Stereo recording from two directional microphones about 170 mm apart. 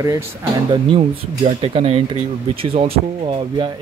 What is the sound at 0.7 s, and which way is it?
Speech, 35° right (ahead or behind).